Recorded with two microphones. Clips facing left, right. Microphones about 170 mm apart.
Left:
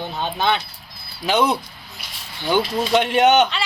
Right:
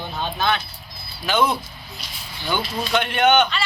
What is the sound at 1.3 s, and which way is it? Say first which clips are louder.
Speech: left 2 dB; 20° left (ahead or behind).